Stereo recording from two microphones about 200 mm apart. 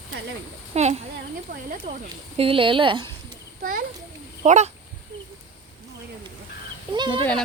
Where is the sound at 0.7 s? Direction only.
35° right (ahead or behind).